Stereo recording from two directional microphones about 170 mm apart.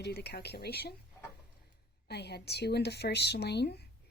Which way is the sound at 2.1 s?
75° left (ahead or behind).